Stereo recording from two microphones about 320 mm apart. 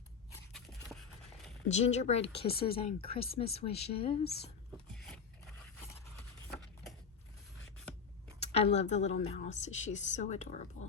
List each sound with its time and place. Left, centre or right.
0.3 s a sound: centre
1.6 s a woman's voice: left
4.2 s speech: left
4.9 s scrape: centre
8.4 s a woman's voice: centre